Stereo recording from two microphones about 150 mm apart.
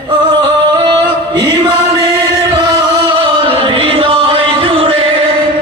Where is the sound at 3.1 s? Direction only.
35° right (ahead or behind).